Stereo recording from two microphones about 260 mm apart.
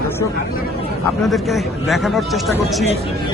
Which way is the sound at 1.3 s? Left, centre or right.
Centre.